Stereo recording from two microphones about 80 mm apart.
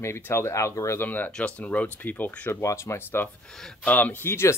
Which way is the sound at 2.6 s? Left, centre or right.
Left.